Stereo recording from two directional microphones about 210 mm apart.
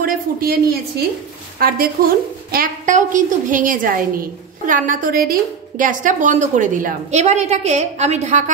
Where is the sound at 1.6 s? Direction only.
45° right (ahead or behind).